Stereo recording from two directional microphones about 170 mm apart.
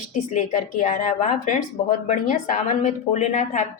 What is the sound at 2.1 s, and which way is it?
Speech, 50° left (ahead or behind).